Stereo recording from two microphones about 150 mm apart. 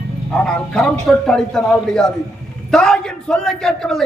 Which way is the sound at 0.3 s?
5° left (ahead or behind).